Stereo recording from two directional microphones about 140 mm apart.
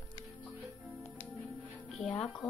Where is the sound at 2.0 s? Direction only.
5° left (ahead or behind).